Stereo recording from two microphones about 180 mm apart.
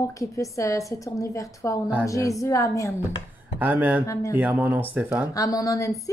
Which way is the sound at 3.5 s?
10° right (ahead or behind).